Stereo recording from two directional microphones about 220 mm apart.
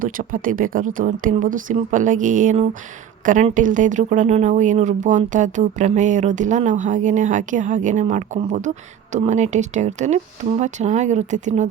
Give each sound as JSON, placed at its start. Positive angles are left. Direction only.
{"t": 0.0, "sound": "speech", "side_deg": -40}